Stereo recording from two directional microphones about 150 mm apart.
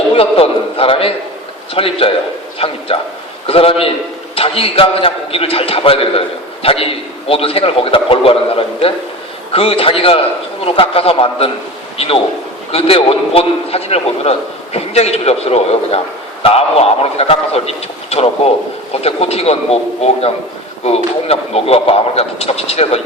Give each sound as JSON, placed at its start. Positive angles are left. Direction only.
{"t": 0.2, "sound": "a man's voice", "side_deg": 40}